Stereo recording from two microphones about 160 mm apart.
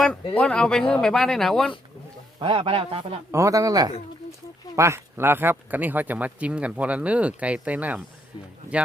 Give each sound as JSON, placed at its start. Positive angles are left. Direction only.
{"t": 0.3, "sound": "speech", "side_deg": 5}
{"t": 2.4, "sound": "a man's voice", "side_deg": -35}
{"t": 3.3, "sound": "speech", "side_deg": -20}